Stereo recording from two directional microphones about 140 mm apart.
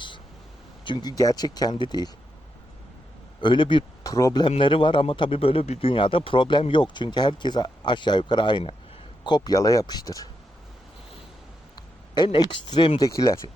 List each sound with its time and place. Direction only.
0.9 s speech: 30° left (ahead or behind)
3.4 s speech: 35° left (ahead or behind)
12.1 s speech: 30° left (ahead or behind)
13.1 s speech: 25° left (ahead or behind)